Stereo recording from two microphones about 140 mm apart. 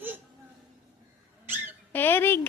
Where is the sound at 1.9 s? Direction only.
15° left (ahead or behind).